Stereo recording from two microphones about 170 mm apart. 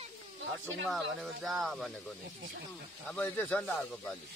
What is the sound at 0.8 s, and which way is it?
Speech, centre (ahead or behind).